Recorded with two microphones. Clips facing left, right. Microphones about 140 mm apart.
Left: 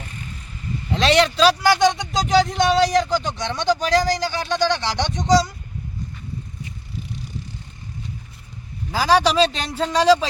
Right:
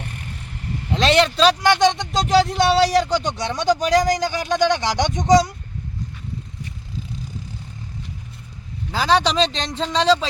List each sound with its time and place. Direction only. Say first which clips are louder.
0.0 s vehicle: right 2 dB; 70° right (ahead or behind)
0.9 s a man's voice: even; centre (ahead or behind)
3.3 s speech: right 1 dB; 10° right (ahead or behind)
8.9 s speech: left 1 dB; 10° left (ahead or behind)